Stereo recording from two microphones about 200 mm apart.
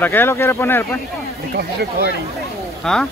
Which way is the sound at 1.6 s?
55° right (ahead or behind).